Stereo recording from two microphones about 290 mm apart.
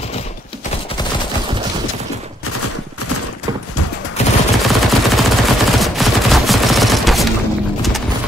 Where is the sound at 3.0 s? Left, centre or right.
Left.